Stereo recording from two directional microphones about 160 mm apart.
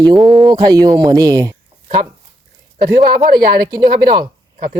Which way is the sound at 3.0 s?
65° right (ahead or behind).